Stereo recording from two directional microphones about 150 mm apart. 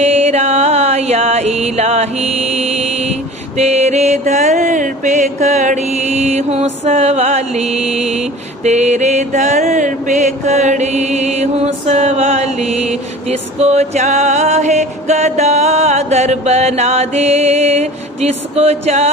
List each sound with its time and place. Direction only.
0.0 s music: 45° right (ahead or behind)